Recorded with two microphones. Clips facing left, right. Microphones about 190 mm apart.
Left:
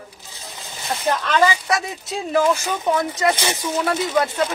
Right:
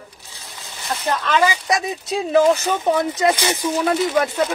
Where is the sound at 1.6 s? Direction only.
20° right (ahead or behind).